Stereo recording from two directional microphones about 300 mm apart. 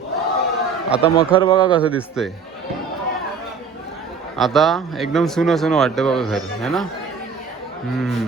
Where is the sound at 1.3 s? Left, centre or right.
Centre.